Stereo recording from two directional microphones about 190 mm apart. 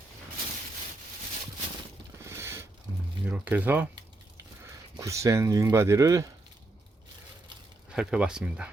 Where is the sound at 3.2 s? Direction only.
10° right (ahead or behind).